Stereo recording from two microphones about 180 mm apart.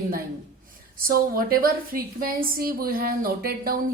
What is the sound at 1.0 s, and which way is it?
A woman's voice, 55° right (ahead or behind).